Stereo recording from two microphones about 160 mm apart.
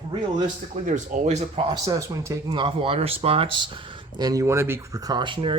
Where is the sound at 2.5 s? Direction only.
35° right (ahead or behind).